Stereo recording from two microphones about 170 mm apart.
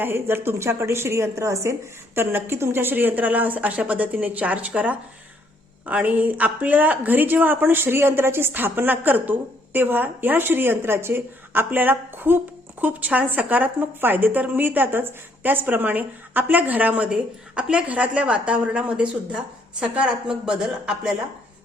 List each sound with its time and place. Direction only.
0.0 s a woman's voice: 15° right (ahead or behind)